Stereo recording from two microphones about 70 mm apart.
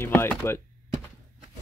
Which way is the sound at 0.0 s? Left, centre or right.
Left.